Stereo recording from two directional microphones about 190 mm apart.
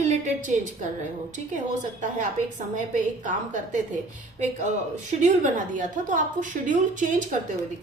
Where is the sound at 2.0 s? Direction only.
40° right (ahead or behind).